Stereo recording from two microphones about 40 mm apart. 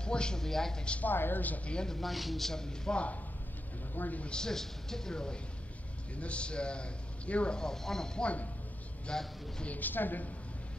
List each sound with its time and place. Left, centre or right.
0.0 s a man's voice: left
0.4 s speech: centre
1.0 s speech: left
1.9 s speech: centre
3.9 s speech: left
4.3 s speech: centre
6.1 s a man's voice: left
7.5 s speech: centre
8.2 s speech: left
9.1 s a man's voice: left
9.7 s a woman's voice: left